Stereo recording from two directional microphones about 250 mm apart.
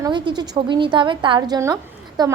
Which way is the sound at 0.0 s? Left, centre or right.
Centre.